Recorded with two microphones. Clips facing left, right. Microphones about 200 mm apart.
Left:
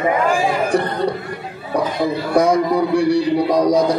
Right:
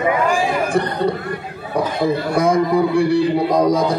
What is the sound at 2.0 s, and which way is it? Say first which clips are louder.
A man's voice: left 1 dB; 55° right (ahead or behind).